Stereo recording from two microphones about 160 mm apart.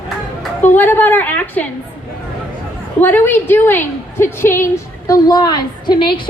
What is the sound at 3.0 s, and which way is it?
A woman's voice, 10° left (ahead or behind).